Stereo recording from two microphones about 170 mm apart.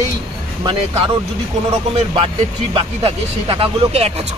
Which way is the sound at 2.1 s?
30° right (ahead or behind).